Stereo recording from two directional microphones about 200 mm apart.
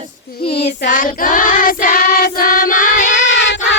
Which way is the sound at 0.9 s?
40° left (ahead or behind).